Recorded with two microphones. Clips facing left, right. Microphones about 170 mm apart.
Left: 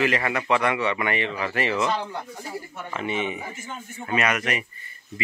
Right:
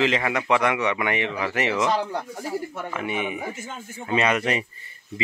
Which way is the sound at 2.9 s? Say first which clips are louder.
Left 2 dB; 10° right (ahead or behind).